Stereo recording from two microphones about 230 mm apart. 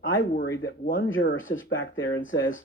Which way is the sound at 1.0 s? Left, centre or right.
Left.